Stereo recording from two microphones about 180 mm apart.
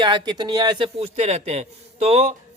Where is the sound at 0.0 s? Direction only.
25° right (ahead or behind).